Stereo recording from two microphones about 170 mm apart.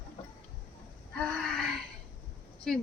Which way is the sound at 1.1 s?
Centre (ahead or behind).